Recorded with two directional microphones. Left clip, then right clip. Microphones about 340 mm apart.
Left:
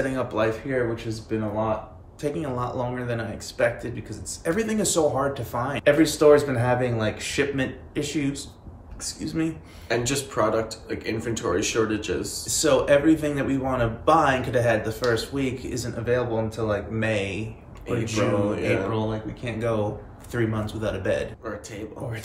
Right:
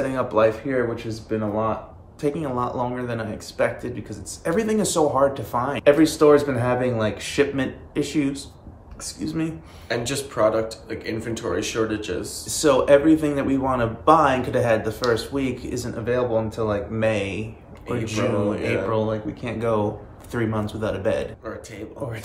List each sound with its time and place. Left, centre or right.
0.1 s speech: centre
9.8 s speech: centre
12.4 s speech: centre
18.4 s speech: centre
18.7 s speech: centre